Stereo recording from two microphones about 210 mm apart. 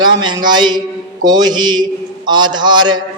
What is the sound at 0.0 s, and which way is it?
A man's voice, 20° right (ahead or behind).